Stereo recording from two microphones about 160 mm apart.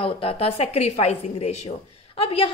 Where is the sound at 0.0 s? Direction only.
35° left (ahead or behind).